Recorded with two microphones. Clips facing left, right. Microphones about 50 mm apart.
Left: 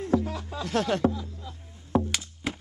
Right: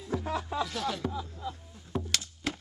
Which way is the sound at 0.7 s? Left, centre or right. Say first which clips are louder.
Left 8 dB; left.